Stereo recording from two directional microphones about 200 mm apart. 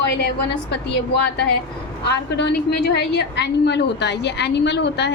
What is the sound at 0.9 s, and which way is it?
A woman's voice, 55° left (ahead or behind).